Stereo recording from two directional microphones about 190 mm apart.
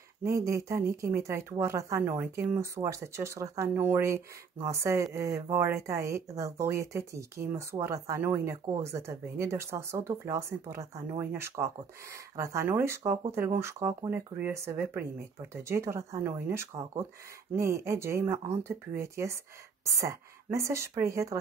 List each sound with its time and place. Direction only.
0.2 s speech: 15° right (ahead or behind)